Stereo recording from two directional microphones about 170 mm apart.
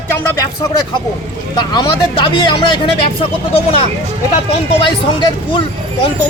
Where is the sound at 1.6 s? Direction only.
25° left (ahead or behind).